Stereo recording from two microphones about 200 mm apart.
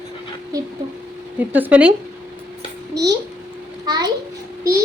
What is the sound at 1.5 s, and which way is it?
Speech, 10° right (ahead or behind).